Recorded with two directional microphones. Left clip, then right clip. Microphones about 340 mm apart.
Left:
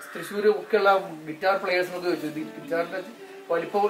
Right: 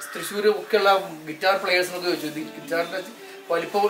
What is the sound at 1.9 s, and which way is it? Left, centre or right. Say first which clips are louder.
A man's voice: right 2 dB; centre.